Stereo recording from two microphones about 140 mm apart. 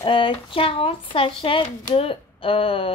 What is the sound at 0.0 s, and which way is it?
Speech, 35° left (ahead or behind).